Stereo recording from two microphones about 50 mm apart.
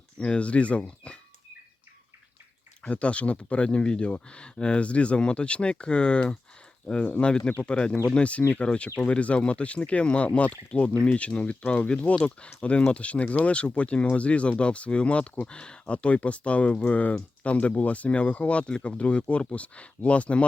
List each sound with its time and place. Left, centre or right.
0.2 s speech: left
2.8 s speech: left